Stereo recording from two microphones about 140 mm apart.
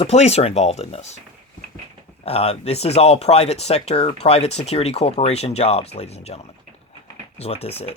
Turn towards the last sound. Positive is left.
turn(degrees=45)  # may be behind; listen again after turning